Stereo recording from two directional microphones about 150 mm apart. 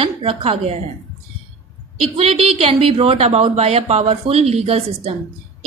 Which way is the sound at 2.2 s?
40° right (ahead or behind).